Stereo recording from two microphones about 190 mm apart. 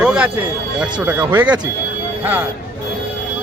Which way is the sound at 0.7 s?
10° right (ahead or behind).